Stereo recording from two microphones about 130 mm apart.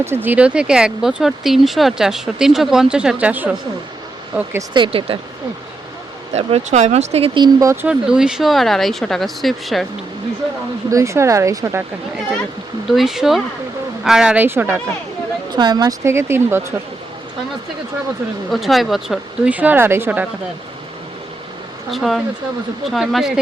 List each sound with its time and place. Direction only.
0.0 s speech: 15° right (ahead or behind)
4.7 s speech: 40° right (ahead or behind)
6.3 s speech: 60° right (ahead or behind)
7.3 s speech: 35° right (ahead or behind)
7.9 s speech: 5° right (ahead or behind)
10.8 s speech: 25° right (ahead or behind)
12.9 s speech: centre (ahead or behind)
15.5 s speech: 30° right (ahead or behind)
18.5 s speech: centre (ahead or behind); by 20.2 s 15° right (ahead or behind)
21.8 s speech: centre (ahead or behind)